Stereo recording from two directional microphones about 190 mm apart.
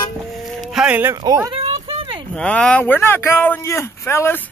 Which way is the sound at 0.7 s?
5° right (ahead or behind).